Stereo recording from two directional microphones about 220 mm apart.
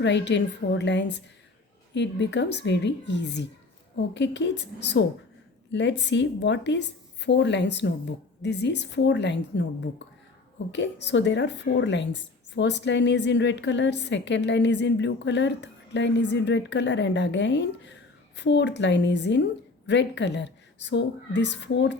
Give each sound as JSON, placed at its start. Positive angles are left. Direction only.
{"t": 0.0, "sound": "a woman's voice", "side_deg": 55}
{"t": 10.7, "sound": "a woman's voice", "side_deg": 55}